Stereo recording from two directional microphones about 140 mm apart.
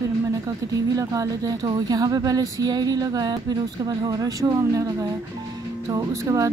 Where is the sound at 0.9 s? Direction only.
25° right (ahead or behind).